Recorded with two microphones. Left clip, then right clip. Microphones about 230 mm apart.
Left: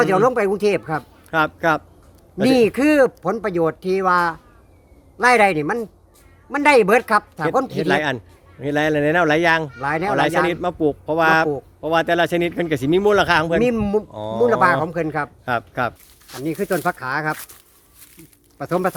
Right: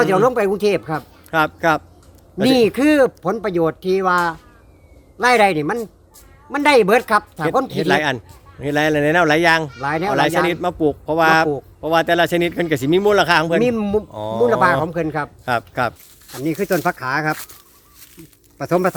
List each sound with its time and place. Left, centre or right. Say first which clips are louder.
0.0 s a man's voice: right 1 dB; centre
16.4 s speech: right 2 dB; right
18.6 s speech: right 3 dB; right